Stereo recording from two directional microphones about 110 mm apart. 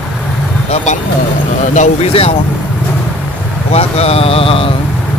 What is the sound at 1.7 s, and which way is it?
Speech, 75° left (ahead or behind).